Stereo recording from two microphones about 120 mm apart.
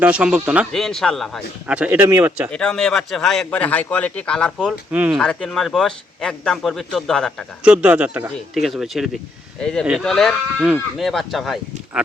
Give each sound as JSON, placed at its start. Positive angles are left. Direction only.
{"t": 0.0, "sound": "speech", "side_deg": -10}
{"t": 0.7, "sound": "speech", "side_deg": 5}
{"t": 1.6, "sound": "speech", "side_deg": -10}
{"t": 2.0, "sound": "speech", "side_deg": -30}
{"t": 2.5, "sound": "speech", "side_deg": 5}
{"t": 4.7, "sound": "speech", "side_deg": -10}
{"t": 5.1, "sound": "speech", "side_deg": 5}
{"t": 7.6, "sound": "speech", "side_deg": -10}
{"t": 8.5, "sound": "speech", "side_deg": 0}